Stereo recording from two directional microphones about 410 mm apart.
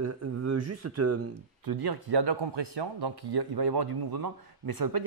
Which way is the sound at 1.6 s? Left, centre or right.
Right.